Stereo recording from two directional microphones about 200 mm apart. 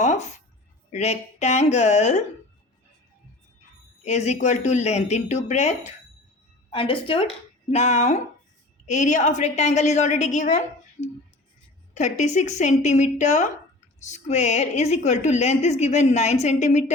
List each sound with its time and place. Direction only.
0.0 s music: 35° left (ahead or behind)
0.9 s a woman's voice: 35° left (ahead or behind)
4.0 s a woman's voice: 35° left (ahead or behind)
11.9 s a woman's voice: 35° left (ahead or behind)